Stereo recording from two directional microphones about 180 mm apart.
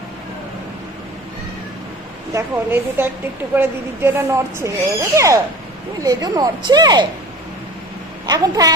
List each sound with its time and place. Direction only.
2.3 s speech: 10° right (ahead or behind)
8.3 s speech: 20° right (ahead or behind)